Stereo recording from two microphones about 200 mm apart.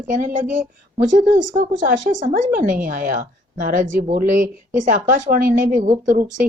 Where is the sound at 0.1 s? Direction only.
40° right (ahead or behind).